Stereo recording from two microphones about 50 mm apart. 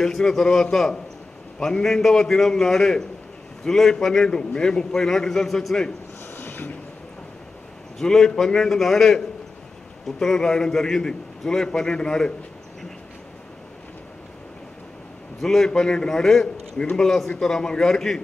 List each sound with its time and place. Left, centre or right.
0.0 s a man's voice: centre
6.3 s a sound: left
8.0 s a man's voice: centre
15.4 s a man's voice: centre